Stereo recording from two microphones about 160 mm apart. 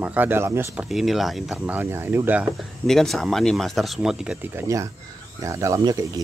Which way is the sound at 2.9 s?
5° left (ahead or behind).